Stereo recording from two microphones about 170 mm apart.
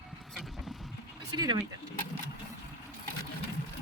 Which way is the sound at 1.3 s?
25° right (ahead or behind).